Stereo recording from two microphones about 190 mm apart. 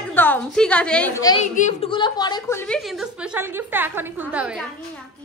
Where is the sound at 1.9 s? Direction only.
25° left (ahead or behind).